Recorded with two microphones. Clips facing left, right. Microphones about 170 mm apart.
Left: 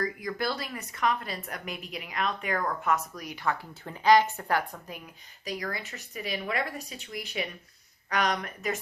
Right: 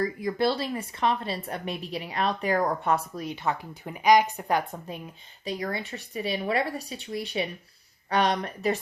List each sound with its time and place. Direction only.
0.0 s speech: 25° right (ahead or behind)